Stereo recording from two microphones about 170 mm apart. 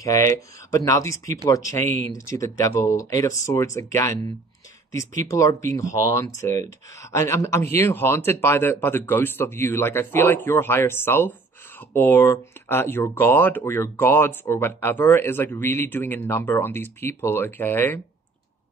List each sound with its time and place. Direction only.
0.8 s speech: 20° left (ahead or behind)
5.2 s speech: 20° left (ahead or behind)